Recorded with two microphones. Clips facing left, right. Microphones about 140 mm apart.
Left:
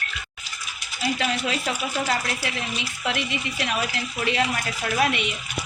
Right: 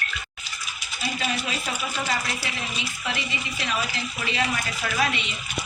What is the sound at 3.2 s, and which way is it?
A woman's voice, 60° left (ahead or behind).